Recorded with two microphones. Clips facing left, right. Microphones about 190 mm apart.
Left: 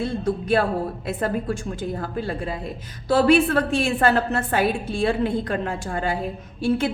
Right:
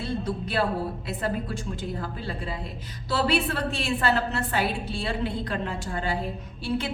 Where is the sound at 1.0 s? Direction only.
50° left (ahead or behind).